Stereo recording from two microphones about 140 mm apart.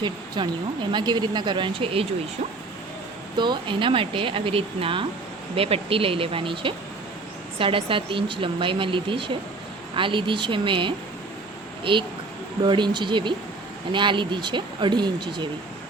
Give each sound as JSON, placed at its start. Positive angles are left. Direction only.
{"t": 0.0, "sound": "speech", "side_deg": -35}
{"t": 3.3, "sound": "speech", "side_deg": -35}
{"t": 12.6, "sound": "speech", "side_deg": -35}